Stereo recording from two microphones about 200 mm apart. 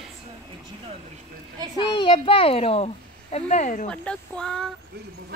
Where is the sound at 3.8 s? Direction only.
5° left (ahead or behind).